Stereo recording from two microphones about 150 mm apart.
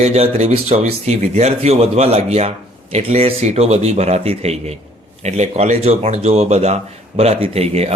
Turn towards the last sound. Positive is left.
turn(degrees=-45)  # may be behind; listen again after turning